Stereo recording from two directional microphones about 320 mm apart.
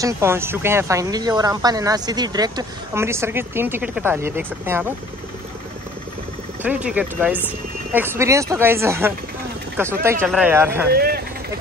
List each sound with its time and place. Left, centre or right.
0.0 s speech: centre
6.6 s speech: centre
10.9 s speech: right